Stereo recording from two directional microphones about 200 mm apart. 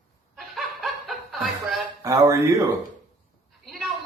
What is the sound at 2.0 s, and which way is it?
Speech, 15° right (ahead or behind).